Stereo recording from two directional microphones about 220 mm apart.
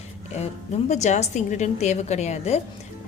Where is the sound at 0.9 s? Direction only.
30° left (ahead or behind).